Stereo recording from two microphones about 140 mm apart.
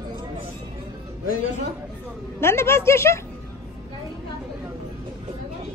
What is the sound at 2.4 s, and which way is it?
Speech, 20° left (ahead or behind).